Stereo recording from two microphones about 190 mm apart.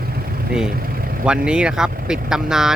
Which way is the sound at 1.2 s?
5° right (ahead or behind).